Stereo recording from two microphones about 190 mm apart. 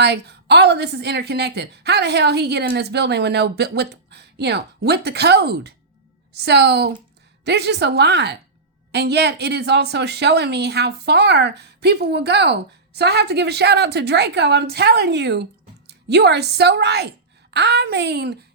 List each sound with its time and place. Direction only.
0.0 s a woman's voice: 60° right (ahead or behind)